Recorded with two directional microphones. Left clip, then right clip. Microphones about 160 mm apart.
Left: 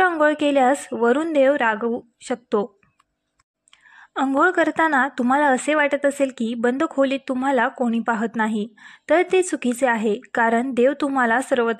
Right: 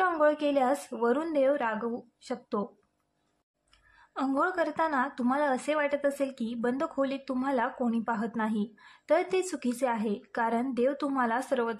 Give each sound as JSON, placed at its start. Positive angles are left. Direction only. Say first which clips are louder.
{"t": 0.2, "sound": "a woman's voice", "louder": "left 8 dB", "side_deg": 35}
{"t": 4.1, "sound": "a woman's voice", "louder": "left 10 dB", "side_deg": 35}